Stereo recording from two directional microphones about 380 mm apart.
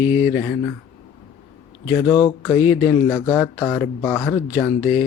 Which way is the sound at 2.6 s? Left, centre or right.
Centre.